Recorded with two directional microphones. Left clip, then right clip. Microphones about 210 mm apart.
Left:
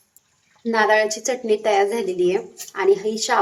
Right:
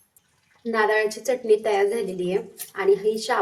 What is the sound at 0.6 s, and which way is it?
A woman's voice, 50° left (ahead or behind).